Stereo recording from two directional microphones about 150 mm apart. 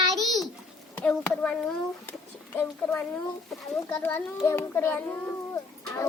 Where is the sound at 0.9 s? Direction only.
10° left (ahead or behind).